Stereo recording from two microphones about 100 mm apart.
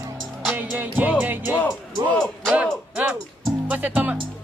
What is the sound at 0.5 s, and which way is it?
Speech, 15° right (ahead or behind).